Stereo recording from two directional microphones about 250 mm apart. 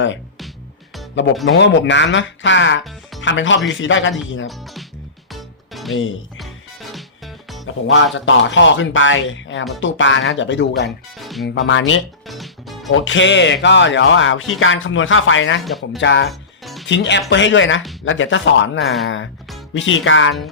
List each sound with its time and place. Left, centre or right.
1.5 s speech: left
4.4 s music: centre
5.9 s speech: left
7.9 s speech: left
11.2 s music: centre
11.4 s speech: left
12.3 s music: centre
12.9 s speech: left
15.6 s speech: centre
16.0 s speech: left